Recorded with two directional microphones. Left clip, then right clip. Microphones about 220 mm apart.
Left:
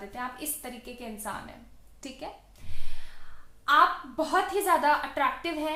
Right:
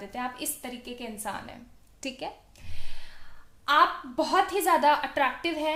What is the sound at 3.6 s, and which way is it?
A woman's voice, 45° right (ahead or behind).